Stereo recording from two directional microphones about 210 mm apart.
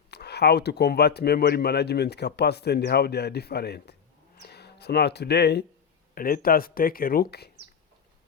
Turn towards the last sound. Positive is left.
turn(degrees=50)  # may be behind; listen again after turning